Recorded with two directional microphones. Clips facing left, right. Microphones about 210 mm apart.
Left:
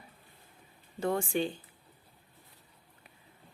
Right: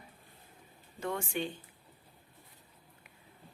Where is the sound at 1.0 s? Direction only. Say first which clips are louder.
Left 5 dB; 35° left (ahead or behind).